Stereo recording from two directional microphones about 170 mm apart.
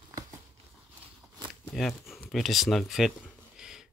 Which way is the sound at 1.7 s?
Centre (ahead or behind).